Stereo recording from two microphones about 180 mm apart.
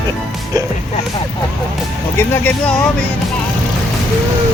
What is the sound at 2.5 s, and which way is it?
Speech, 5° left (ahead or behind).